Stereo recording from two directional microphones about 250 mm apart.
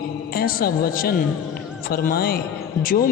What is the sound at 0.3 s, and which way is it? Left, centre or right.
Speech, left.